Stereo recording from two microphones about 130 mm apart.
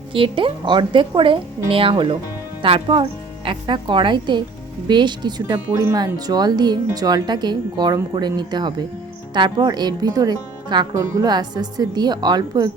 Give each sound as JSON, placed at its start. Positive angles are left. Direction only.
{"t": 0.1, "sound": "speech", "side_deg": -40}
{"t": 10.9, "sound": "a woman's voice", "side_deg": -20}
{"t": 11.3, "sound": "speech", "side_deg": -35}